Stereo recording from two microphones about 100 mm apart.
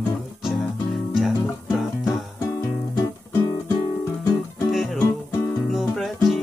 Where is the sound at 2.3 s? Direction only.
30° left (ahead or behind).